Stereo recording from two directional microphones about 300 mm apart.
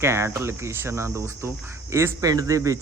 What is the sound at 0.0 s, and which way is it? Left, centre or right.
Speech, centre.